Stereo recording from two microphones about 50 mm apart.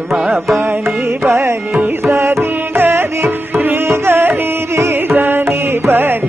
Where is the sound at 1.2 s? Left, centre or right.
Right.